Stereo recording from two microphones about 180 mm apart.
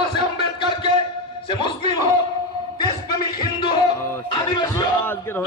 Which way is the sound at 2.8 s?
25° left (ahead or behind).